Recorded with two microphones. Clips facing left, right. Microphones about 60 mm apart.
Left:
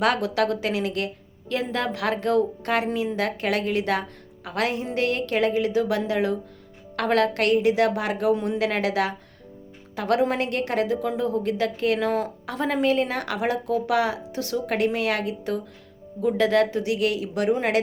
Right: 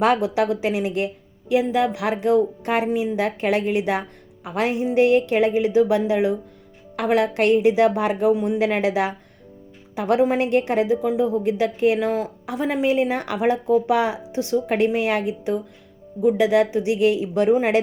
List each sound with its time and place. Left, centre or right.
0.0 s speech: right
11.9 s speech: centre; by 17.6 s right